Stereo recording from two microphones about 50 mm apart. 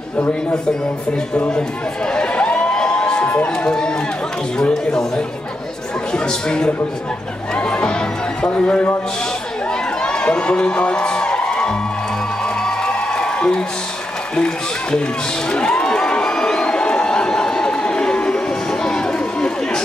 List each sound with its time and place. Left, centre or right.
2.0 s a sound: centre
3.5 s speech: centre
10.0 s music: centre
14.3 s a man's voice: centre
15.5 s crowd: centre